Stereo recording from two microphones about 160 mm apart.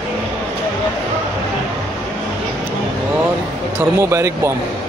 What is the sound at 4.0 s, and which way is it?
Speech, 15° right (ahead or behind).